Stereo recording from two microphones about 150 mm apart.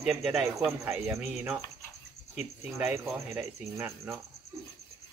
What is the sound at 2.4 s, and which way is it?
Speech, 15° right (ahead or behind).